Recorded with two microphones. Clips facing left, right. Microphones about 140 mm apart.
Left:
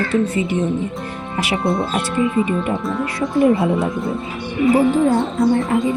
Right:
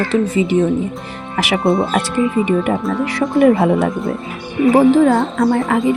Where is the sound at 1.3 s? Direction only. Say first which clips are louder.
Right 4 dB; 90° right.